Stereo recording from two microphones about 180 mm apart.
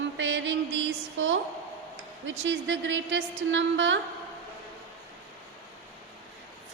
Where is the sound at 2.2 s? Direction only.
90° right.